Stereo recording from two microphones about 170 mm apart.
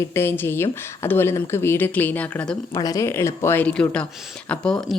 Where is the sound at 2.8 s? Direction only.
20° left (ahead or behind).